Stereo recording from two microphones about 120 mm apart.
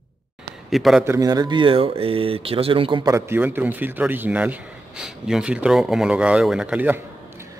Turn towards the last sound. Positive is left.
turn(degrees=-20)  # may be behind; listen again after turning